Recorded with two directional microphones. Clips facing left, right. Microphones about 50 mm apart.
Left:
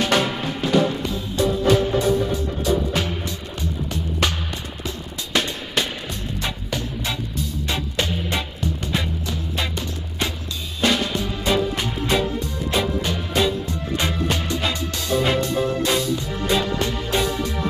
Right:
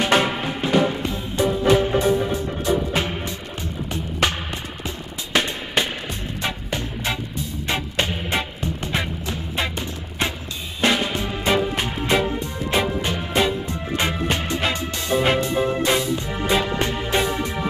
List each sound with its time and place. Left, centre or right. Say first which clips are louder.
0.0 s music: right 1 dB; right